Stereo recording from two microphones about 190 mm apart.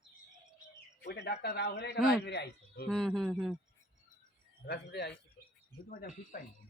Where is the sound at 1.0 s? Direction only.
60° left (ahead or behind).